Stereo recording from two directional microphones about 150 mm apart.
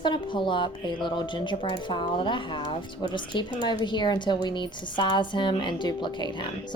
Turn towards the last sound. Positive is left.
turn(degrees=30)  # may be behind; listen again after turning